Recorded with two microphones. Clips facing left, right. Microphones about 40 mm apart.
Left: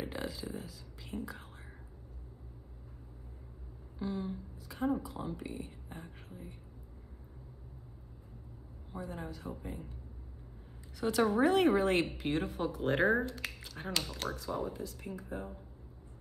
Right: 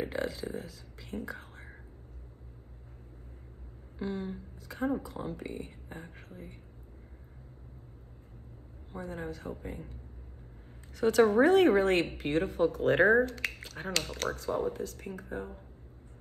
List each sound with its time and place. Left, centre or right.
0.0 s speech: right
4.0 s speech: right
8.9 s a woman's voice: right
11.0 s a woman's voice: right